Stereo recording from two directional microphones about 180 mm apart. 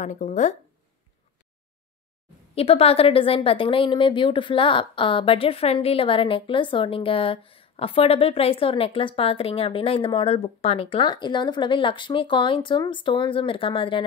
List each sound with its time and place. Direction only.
0.0 s speech: 45° left (ahead or behind)
2.5 s a woman's voice: 35° left (ahead or behind)